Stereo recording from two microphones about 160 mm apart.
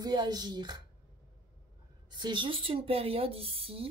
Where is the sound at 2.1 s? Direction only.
30° right (ahead or behind).